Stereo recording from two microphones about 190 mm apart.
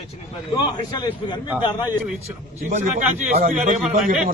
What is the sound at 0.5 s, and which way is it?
A man's voice, 20° left (ahead or behind).